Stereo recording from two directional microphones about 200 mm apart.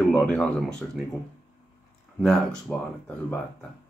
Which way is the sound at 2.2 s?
5° left (ahead or behind).